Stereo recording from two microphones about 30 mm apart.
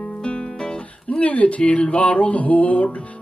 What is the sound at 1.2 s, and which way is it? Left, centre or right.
Music, left.